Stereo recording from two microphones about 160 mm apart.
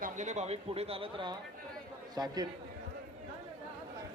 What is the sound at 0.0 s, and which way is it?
A man's voice, 50° right (ahead or behind).